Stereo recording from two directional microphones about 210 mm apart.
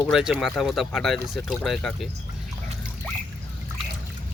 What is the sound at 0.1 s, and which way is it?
Speech, centre (ahead or behind).